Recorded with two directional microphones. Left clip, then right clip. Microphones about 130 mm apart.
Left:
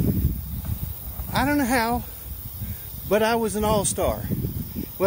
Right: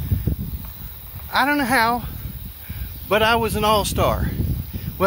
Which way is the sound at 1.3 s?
25° left (ahead or behind).